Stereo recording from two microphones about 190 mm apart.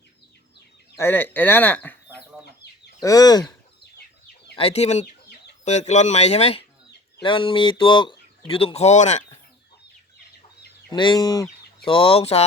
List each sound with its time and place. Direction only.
0.9 s speech: 10° left (ahead or behind)
3.0 s speech: 20° left (ahead or behind)
4.5 s speech: 30° left (ahead or behind)
10.9 s speech: 25° left (ahead or behind)